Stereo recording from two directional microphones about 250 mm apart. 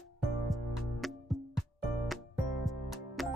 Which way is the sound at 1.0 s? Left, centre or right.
Centre.